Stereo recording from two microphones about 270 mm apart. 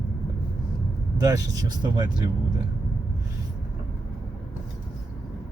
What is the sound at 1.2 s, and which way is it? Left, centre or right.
Speech, centre.